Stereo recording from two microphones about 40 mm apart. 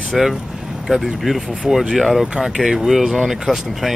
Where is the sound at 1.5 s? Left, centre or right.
Centre.